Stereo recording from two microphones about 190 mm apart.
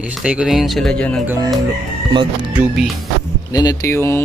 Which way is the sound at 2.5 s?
5° right (ahead or behind).